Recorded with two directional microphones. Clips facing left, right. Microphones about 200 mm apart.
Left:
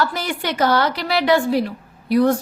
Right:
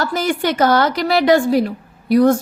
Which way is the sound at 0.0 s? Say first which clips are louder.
Right 4 dB; 45° right (ahead or behind).